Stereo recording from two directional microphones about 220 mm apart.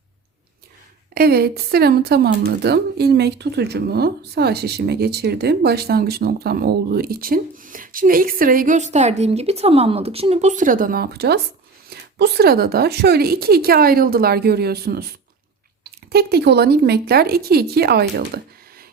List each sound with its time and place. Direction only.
1.1 s speech: 45° right (ahead or behind)